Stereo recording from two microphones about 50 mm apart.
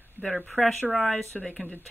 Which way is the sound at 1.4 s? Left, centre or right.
Left.